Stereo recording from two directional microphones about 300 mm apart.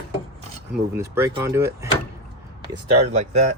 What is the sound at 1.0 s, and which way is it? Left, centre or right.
Speech, centre.